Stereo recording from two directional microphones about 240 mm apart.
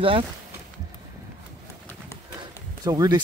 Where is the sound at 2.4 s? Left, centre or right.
Centre.